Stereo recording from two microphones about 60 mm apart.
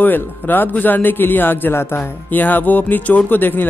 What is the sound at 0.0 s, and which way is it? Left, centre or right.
Speech, left.